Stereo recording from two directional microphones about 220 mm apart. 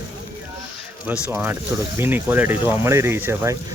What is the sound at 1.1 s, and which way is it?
Speech, 10° right (ahead or behind).